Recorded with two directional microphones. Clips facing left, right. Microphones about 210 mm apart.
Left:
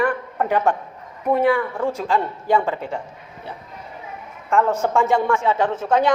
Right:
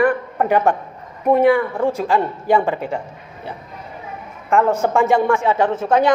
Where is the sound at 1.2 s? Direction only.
20° right (ahead or behind).